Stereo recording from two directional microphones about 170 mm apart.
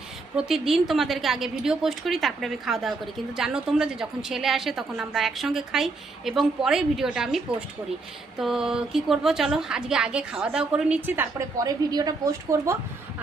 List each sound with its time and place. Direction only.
0.3 s a woman's voice: 5° right (ahead or behind); by 12.7 s 20° right (ahead or behind)